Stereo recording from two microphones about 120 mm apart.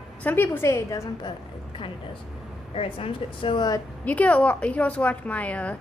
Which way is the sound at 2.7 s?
50° left (ahead or behind).